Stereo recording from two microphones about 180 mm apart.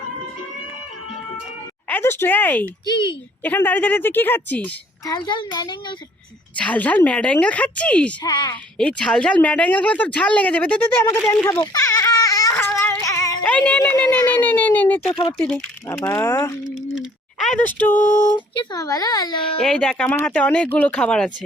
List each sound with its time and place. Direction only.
1.9 s speech: 10° left (ahead or behind)
2.8 s a child's voice: 25° left (ahead or behind)
3.4 s speech: 10° left (ahead or behind)
5.0 s a child's voice: 25° left (ahead or behind)
6.6 s speech: 10° left (ahead or behind)
8.2 s a child's voice: 20° left (ahead or behind)
8.8 s speech: 5° left (ahead or behind)
11.6 s baby cry: 20° left (ahead or behind)
13.4 s speech: 5° left (ahead or behind)
15.2 s a child's voice: 20° left (ahead or behind)
15.4 s speech: 5° left (ahead or behind)
16.9 s speech: centre (ahead or behind)
18.3 s a child's voice: 25° left (ahead or behind)
19.6 s speech: 5° left (ahead or behind)